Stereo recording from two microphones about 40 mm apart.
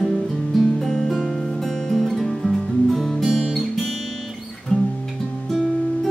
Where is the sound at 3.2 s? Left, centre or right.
Centre.